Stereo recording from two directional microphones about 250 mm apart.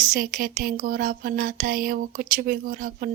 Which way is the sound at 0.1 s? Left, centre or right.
Right.